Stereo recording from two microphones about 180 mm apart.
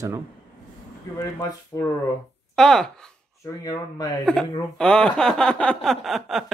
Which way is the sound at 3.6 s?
20° left (ahead or behind).